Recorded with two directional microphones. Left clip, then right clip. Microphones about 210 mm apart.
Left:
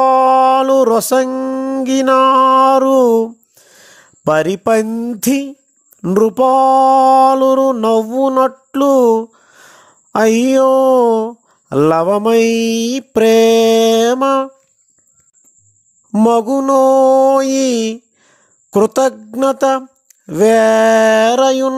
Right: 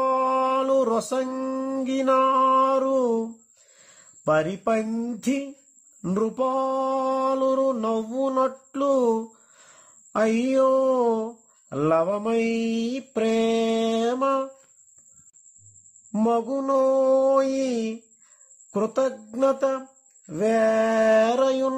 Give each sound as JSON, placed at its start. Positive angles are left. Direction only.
{"t": 0.0, "sound": "a sound", "side_deg": 45}
{"t": 3.8, "sound": "speech", "side_deg": 50}
{"t": 6.0, "sound": "mantra", "side_deg": 45}
{"t": 16.1, "sound": "mantra", "side_deg": 45}